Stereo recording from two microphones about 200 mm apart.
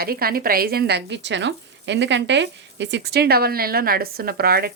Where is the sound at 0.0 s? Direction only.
50° right (ahead or behind).